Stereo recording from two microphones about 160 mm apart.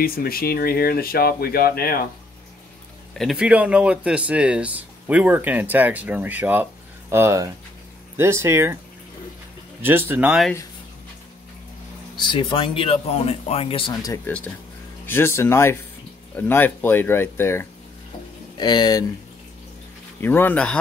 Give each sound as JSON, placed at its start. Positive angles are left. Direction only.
{"t": 0.0, "sound": "speech", "side_deg": 70}
{"t": 3.2, "sound": "speech", "side_deg": -5}
{"t": 9.8, "sound": "speech", "side_deg": -15}
{"t": 12.2, "sound": "speech", "side_deg": 30}
{"t": 14.2, "sound": "speech", "side_deg": 10}
{"t": 18.6, "sound": "speech", "side_deg": 25}
{"t": 20.2, "sound": "speech", "side_deg": 10}